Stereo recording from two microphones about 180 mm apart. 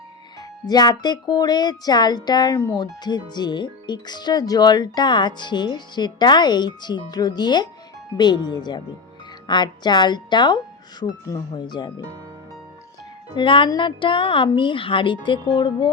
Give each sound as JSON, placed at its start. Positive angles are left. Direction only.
{"t": 0.6, "sound": "speech", "side_deg": 20}
{"t": 13.3, "sound": "speech", "side_deg": 25}